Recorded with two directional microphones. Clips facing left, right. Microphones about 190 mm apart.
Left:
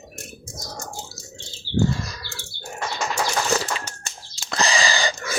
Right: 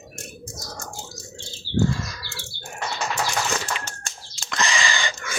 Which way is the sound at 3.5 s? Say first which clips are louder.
Left 4 dB; 35° left (ahead or behind).